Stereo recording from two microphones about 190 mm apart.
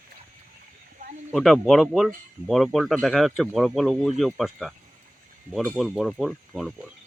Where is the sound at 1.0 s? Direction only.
45° right (ahead or behind).